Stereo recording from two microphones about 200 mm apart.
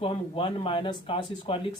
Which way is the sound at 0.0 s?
25° left (ahead or behind).